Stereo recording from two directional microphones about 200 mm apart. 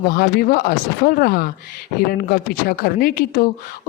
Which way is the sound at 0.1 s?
50° left (ahead or behind).